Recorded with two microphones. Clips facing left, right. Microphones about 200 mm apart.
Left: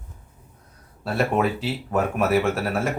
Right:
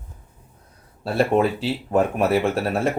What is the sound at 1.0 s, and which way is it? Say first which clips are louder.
Speech: right 3 dB; 30° right (ahead or behind).